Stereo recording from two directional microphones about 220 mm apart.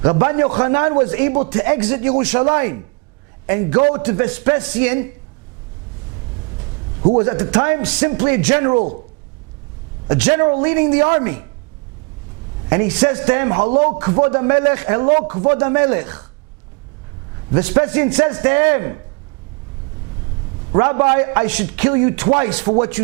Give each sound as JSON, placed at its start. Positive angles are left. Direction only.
{"t": 0.0, "sound": "a man's voice", "side_deg": -20}
{"t": 7.2, "sound": "a man's voice", "side_deg": -15}
{"t": 10.2, "sound": "a man's voice", "side_deg": -15}
{"t": 12.7, "sound": "a man's voice", "side_deg": -15}
{"t": 15.3, "sound": "speech", "side_deg": -25}
{"t": 15.5, "sound": "a man's voice", "side_deg": -15}
{"t": 17.5, "sound": "a man's voice", "side_deg": -15}
{"t": 20.7, "sound": "a man's voice", "side_deg": -20}